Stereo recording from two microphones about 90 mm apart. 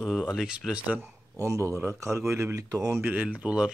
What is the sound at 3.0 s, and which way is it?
Speech, 15° right (ahead or behind).